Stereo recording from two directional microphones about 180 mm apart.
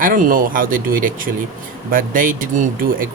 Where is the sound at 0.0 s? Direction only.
50° right (ahead or behind).